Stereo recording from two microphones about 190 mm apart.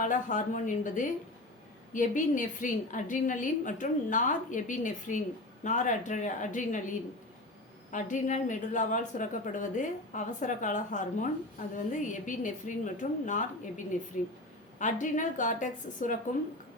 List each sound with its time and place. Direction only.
0.0 s a woman's voice: 40° left (ahead or behind)